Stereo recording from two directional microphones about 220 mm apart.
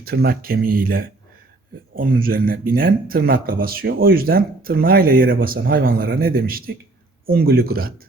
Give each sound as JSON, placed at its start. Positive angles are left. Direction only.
{"t": 0.0, "sound": "speech", "side_deg": -45}